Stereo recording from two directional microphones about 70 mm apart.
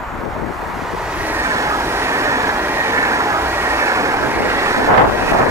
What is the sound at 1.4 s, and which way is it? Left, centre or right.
Train, right.